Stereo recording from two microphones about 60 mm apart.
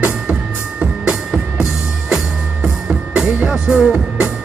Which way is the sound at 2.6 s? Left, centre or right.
Centre.